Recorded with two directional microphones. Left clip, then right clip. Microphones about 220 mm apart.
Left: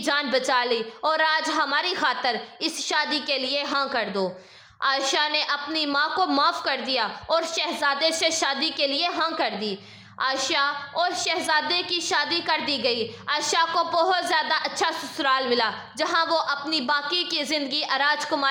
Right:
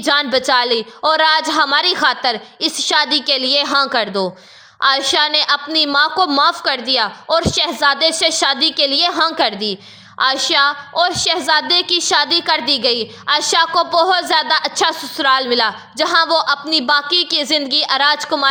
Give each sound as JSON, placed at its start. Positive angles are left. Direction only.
{"t": 0.0, "sound": "a woman's voice", "side_deg": -25}